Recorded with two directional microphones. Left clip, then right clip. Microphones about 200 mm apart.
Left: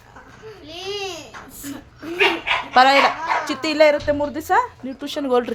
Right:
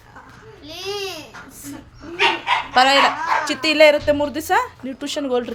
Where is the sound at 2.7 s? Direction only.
15° left (ahead or behind).